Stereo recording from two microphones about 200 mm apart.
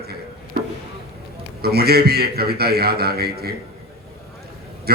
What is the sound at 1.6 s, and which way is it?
A man's voice, 50° right (ahead or behind).